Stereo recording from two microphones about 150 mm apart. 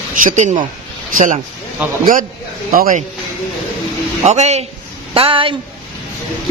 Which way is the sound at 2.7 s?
70° right (ahead or behind).